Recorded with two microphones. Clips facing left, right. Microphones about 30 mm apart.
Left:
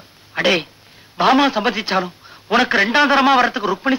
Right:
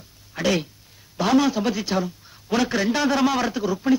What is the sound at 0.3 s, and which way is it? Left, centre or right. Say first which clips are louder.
A man's voice: left 6 dB; left.